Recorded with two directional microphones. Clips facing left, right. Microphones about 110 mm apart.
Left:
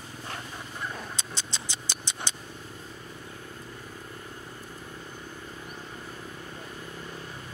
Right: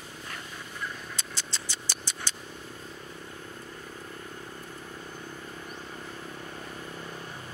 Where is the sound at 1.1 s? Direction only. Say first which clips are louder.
Left 1 dB; 20° left (ahead or behind).